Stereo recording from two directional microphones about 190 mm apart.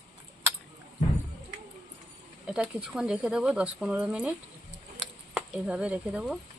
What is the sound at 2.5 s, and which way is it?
Speech, 5° right (ahead or behind).